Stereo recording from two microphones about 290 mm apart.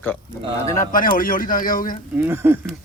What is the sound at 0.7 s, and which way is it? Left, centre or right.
Speech, left.